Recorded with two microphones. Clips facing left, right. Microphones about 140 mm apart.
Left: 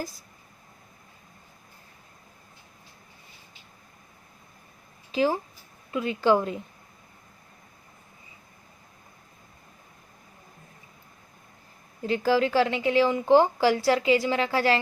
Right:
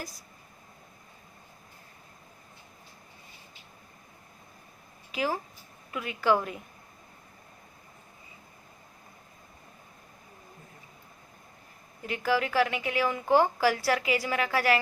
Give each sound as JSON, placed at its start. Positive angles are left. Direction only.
{"t": 5.1, "sound": "speech", "side_deg": 30}
{"t": 12.0, "sound": "speech", "side_deg": 30}